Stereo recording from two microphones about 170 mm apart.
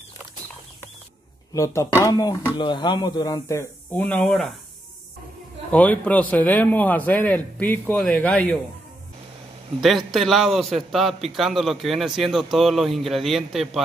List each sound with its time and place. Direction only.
1.5 s a man's voice: 15° left (ahead or behind)
5.7 s a man's voice: 10° left (ahead or behind)
9.8 s speech: centre (ahead or behind)